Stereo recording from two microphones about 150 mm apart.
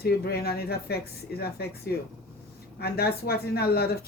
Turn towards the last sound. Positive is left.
turn(degrees=90)